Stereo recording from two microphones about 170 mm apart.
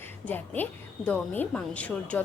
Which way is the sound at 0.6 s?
10° left (ahead or behind).